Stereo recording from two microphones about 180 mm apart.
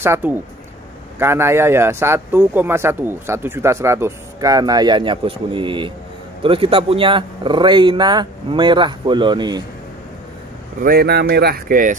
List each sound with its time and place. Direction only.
0.0 s a man's voice: 10° right (ahead or behind)
10.8 s speech: 60° right (ahead or behind)